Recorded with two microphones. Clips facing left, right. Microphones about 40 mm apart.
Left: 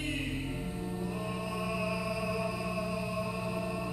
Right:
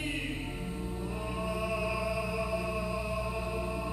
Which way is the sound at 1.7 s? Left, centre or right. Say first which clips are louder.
Even; centre.